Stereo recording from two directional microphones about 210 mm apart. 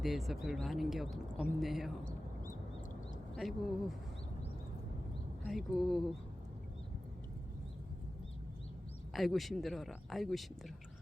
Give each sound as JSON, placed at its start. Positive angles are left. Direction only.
{"t": 0.0, "sound": "speech", "side_deg": 0}
{"t": 3.3, "sound": "speech", "side_deg": 0}
{"t": 5.5, "sound": "speech", "side_deg": 0}
{"t": 9.1, "sound": "speech", "side_deg": 0}